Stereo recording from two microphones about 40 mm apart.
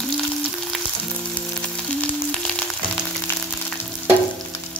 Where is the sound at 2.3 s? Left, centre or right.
Left.